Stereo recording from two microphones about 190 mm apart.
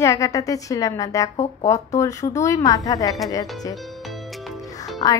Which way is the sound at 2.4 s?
15° left (ahead or behind).